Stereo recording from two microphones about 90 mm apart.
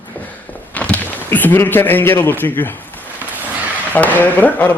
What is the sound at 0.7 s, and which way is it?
A man's voice, 15° left (ahead or behind).